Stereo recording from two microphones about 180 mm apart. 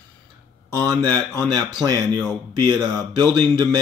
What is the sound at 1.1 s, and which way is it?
Speech, 5° left (ahead or behind).